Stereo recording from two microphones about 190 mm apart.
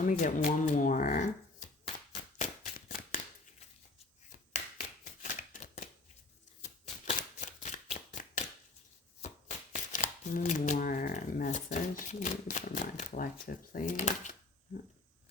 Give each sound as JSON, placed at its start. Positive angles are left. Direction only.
{"t": 0.1, "sound": "speech", "side_deg": 45}
{"t": 2.4, "sound": "a sound", "side_deg": 45}
{"t": 6.6, "sound": "shuffling cards", "side_deg": 40}
{"t": 9.2, "sound": "chopping", "side_deg": 40}
{"t": 9.7, "sound": "shuffling cards", "side_deg": 40}